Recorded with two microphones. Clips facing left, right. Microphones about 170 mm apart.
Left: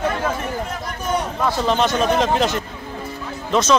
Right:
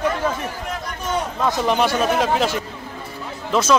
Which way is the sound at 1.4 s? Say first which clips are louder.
Right 1 dB; 15° right (ahead or behind).